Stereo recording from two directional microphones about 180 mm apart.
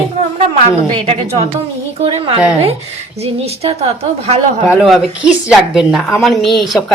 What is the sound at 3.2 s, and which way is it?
A woman's voice, 35° right (ahead or behind).